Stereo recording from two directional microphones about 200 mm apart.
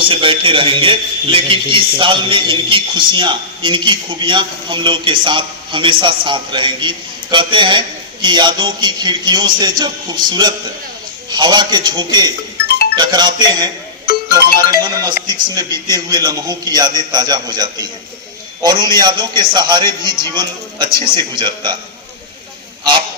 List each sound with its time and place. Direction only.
0.0 s a man's voice: 25° right (ahead or behind)